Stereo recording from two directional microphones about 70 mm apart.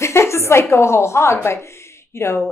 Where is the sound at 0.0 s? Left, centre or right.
Left.